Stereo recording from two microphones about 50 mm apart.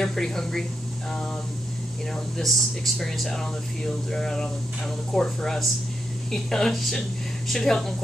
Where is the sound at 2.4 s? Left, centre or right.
Centre.